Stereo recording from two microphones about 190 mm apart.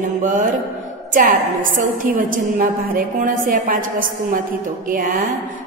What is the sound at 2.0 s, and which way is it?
A woman's voice, 45° right (ahead or behind).